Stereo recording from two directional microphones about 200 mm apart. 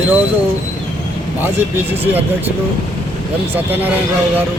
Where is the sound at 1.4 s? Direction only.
10° right (ahead or behind).